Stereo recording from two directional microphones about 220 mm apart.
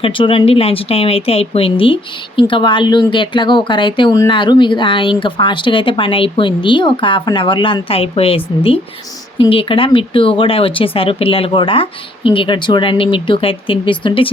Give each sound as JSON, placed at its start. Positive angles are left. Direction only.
{"t": 0.0, "sound": "speech", "side_deg": 25}